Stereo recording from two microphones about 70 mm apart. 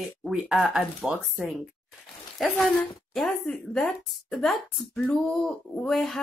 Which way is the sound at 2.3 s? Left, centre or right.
Centre.